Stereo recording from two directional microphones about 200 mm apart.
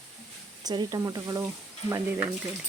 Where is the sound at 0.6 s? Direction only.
20° right (ahead or behind).